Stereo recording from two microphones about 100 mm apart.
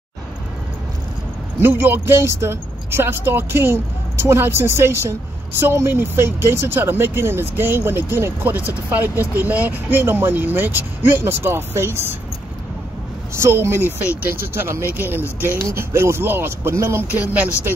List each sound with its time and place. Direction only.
1.6 s speech: 20° right (ahead or behind)
13.3 s speech: 25° right (ahead or behind)
17.2 s speech: 15° right (ahead or behind)